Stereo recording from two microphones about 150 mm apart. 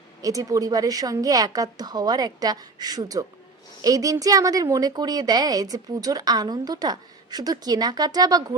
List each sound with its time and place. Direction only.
0.2 s a woman's voice: 25° right (ahead or behind)